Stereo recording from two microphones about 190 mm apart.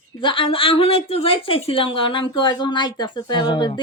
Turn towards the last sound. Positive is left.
turn(degrees=25)  # may be behind; listen again after turning